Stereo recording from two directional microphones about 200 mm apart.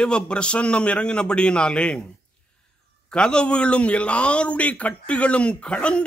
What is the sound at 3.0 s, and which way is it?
A man's voice, 5° left (ahead or behind).